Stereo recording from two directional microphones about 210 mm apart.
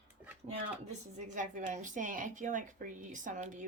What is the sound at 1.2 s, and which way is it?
Speech, 35° right (ahead or behind).